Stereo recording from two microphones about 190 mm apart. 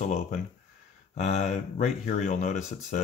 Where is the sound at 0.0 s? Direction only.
40° left (ahead or behind).